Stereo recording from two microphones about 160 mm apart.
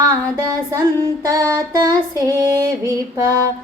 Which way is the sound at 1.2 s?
20° right (ahead or behind).